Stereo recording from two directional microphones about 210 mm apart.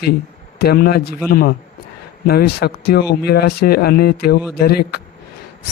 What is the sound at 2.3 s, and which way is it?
Speech, 50° left (ahead or behind).